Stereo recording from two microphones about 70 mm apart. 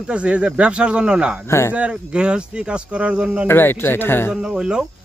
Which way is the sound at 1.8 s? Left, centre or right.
Centre.